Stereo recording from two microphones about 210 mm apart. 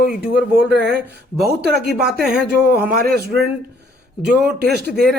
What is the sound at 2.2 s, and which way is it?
Speech, 5° right (ahead or behind).